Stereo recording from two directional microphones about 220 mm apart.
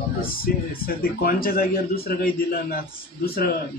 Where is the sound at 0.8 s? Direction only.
45° left (ahead or behind).